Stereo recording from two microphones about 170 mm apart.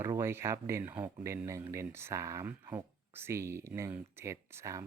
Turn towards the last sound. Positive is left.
turn(degrees=-15)  # may be behind; listen again after turning